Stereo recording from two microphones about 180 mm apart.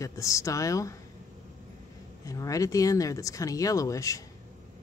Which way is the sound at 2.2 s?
20° left (ahead or behind).